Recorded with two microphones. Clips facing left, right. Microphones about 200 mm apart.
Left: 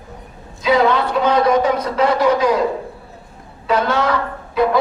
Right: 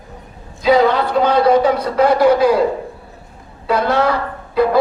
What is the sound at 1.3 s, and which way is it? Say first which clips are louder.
A man's voice: right 2 dB; 30° right (ahead or behind).